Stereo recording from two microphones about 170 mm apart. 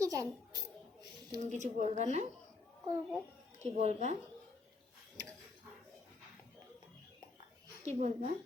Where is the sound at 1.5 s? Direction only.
45° right (ahead or behind).